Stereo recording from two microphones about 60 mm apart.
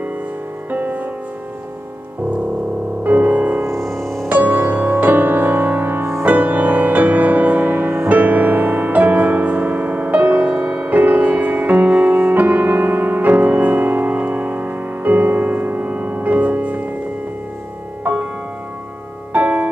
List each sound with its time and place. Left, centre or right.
0.7 s music: right
3.0 s music: right
3.8 s music: centre
4.3 s music: right
6.2 s music: right
18.0 s music: right
19.3 s music: right